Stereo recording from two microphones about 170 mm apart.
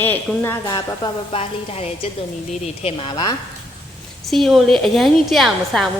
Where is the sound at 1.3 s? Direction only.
35° left (ahead or behind).